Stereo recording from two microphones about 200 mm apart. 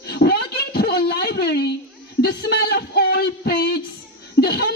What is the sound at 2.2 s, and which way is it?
Speech, 55° left (ahead or behind).